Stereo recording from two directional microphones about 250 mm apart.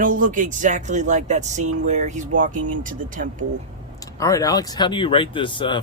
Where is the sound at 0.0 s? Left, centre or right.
Right.